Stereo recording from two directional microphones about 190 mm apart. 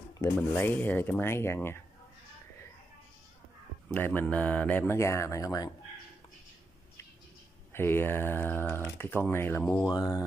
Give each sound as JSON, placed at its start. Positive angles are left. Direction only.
{"t": 0.2, "sound": "speech", "side_deg": 10}
{"t": 3.9, "sound": "speech", "side_deg": 10}
{"t": 7.7, "sound": "speech", "side_deg": 10}
{"t": 9.9, "sound": "speech", "side_deg": 20}